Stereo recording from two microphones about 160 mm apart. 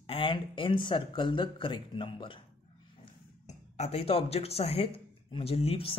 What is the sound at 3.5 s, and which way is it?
A man's voice, 45° left (ahead or behind).